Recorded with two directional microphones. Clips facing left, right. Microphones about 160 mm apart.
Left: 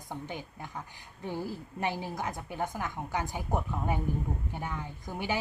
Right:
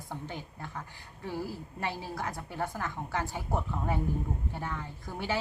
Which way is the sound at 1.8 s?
20° left (ahead or behind).